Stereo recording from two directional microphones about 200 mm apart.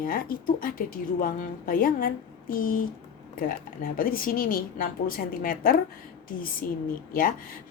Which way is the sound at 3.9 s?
45° left (ahead or behind).